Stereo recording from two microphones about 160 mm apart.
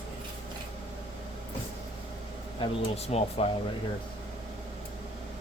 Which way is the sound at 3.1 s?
40° left (ahead or behind).